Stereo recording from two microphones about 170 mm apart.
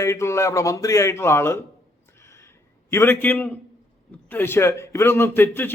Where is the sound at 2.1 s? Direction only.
15° left (ahead or behind).